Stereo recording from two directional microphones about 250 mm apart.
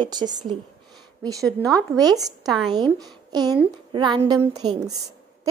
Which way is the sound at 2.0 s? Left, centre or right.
Centre.